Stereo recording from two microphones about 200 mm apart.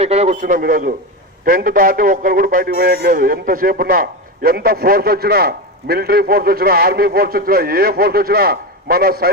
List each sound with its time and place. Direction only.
0.0 s a man's voice: 30° right (ahead or behind); by 9.3 s 50° right (ahead or behind)